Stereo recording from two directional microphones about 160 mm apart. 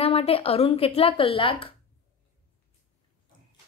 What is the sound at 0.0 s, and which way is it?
A woman's voice, 35° left (ahead or behind).